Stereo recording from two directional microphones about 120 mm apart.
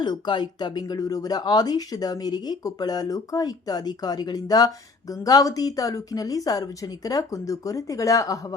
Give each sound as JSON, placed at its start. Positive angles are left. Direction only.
{"t": 0.0, "sound": "speech", "side_deg": 35}